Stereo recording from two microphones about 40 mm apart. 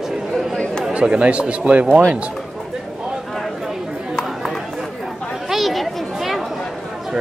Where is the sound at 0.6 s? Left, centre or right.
Left.